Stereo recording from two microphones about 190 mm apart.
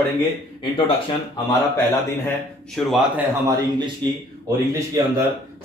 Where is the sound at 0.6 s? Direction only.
25° left (ahead or behind).